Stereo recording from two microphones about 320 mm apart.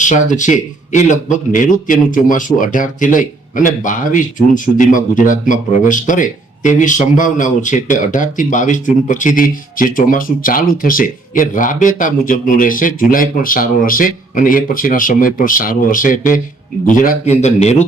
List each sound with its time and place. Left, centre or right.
0.0 s speech: left